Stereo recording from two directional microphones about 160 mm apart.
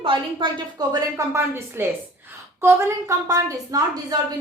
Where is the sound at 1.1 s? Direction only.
15° right (ahead or behind).